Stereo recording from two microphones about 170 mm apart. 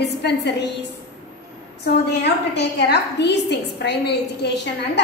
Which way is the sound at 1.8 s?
75° left (ahead or behind).